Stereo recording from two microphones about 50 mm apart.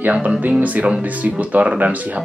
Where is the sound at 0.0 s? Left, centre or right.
Right.